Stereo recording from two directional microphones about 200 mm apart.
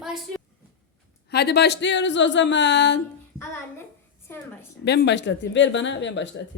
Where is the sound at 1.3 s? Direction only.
55° left (ahead or behind).